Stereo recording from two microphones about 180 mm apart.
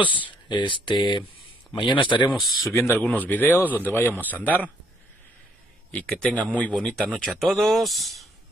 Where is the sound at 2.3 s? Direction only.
Centre (ahead or behind).